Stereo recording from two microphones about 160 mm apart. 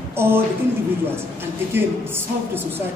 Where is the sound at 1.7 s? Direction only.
15° right (ahead or behind).